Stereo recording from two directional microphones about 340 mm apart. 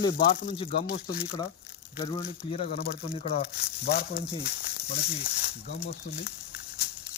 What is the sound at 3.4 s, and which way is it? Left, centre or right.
Speech, left.